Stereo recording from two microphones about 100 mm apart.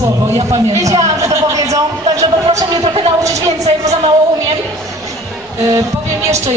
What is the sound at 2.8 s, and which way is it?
Speech, 65° right (ahead or behind).